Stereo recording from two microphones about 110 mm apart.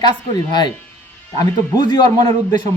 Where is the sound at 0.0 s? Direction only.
40° left (ahead or behind).